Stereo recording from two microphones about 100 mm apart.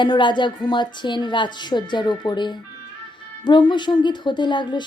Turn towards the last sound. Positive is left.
turn(degrees=50)  # may be behind; listen again after turning